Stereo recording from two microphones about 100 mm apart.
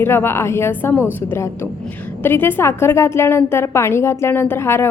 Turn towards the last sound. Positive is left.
turn(degrees=25)  # may be behind; listen again after turning